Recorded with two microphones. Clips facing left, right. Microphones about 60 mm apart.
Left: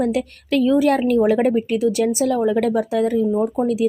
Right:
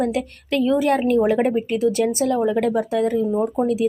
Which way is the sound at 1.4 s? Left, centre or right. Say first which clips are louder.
Left 2 dB; centre.